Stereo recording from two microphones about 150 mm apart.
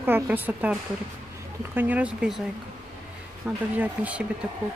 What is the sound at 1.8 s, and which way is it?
Speech, 10° right (ahead or behind).